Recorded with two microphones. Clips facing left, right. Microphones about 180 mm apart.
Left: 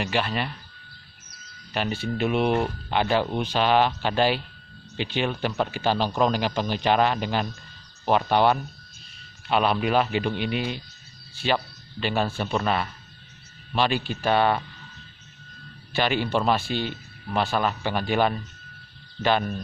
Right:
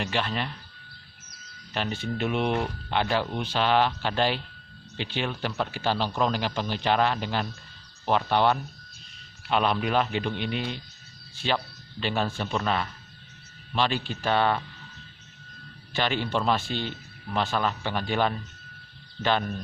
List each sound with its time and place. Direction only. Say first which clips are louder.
0.0 s speech: left 3 dB; 10° left (ahead or behind)
1.7 s speech: left 3 dB; 10° left (ahead or behind)
15.9 s speech: left 3 dB; 10° left (ahead or behind)